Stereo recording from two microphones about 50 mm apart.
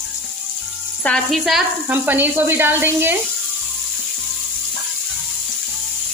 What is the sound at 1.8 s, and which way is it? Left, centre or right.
Speech, right.